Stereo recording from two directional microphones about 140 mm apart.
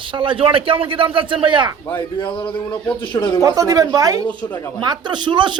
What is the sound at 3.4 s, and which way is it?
A man's voice, 25° right (ahead or behind).